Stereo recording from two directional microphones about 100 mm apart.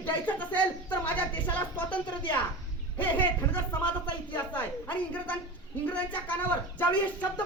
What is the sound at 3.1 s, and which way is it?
Speech, 15° left (ahead or behind).